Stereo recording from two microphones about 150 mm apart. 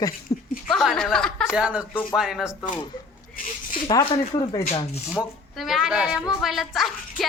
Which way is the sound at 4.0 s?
35° left (ahead or behind).